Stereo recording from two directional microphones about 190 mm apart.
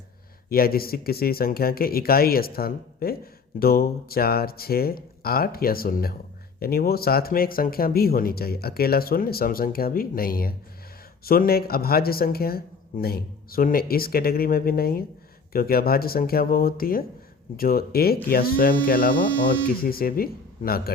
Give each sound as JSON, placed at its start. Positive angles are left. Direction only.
{"t": 0.5, "sound": "speech", "side_deg": 50}